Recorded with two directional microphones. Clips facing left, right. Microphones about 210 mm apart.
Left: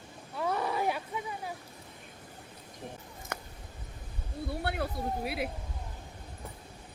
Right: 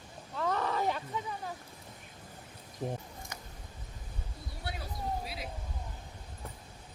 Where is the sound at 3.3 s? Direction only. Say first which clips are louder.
Left 11 dB; 60° left (ahead or behind).